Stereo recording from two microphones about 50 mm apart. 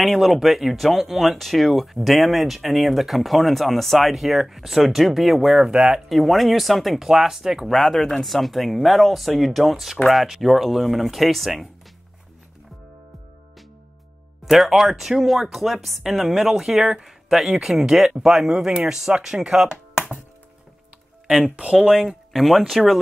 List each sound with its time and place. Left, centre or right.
0.0 s speech: centre
5.7 s speech: centre
5.9 s speech: centre
7.7 s speech: centre
14.4 s speech: centre
21.8 s speech: centre
22.3 s speech: centre